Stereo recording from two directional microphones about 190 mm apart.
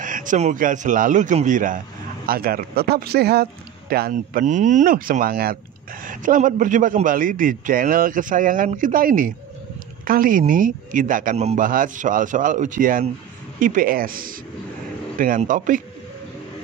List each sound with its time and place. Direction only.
0.0 s a man's voice: 45° right (ahead or behind)